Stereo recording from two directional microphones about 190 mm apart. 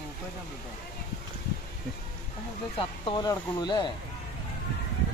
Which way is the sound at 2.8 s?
25° left (ahead or behind).